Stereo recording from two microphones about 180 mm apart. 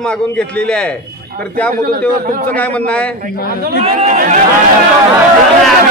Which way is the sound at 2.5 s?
10° left (ahead or behind).